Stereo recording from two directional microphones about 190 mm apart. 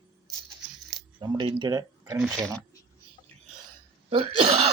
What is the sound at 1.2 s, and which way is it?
Speech, 25° right (ahead or behind).